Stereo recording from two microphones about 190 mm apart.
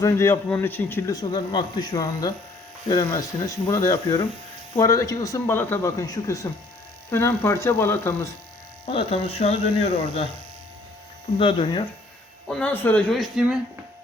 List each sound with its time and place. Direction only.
0.0 s a man's voice: 15° left (ahead or behind)
8.9 s speech: 30° left (ahead or behind)
11.3 s speech: 25° left (ahead or behind)
12.5 s speech: 5° left (ahead or behind)